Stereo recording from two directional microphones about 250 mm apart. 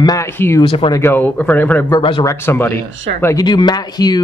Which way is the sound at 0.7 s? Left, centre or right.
Centre.